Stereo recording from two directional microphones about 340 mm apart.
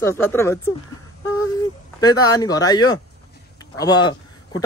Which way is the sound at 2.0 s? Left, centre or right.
Centre.